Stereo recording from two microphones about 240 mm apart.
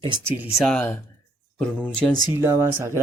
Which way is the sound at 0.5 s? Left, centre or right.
Centre.